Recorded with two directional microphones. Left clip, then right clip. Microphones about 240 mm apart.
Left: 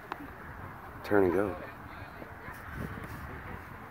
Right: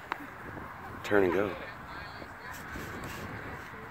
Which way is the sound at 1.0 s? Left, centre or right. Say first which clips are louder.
Even; centre.